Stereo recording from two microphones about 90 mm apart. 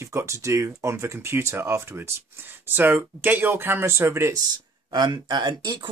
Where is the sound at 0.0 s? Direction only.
30° right (ahead or behind).